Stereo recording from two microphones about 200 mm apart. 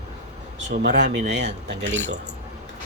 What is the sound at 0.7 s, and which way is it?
Speech, 55° right (ahead or behind).